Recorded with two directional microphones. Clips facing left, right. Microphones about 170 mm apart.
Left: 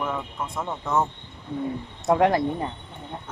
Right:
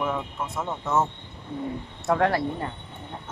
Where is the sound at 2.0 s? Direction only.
20° left (ahead or behind).